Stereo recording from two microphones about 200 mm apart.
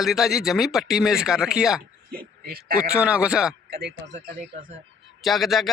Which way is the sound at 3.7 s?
55° right (ahead or behind).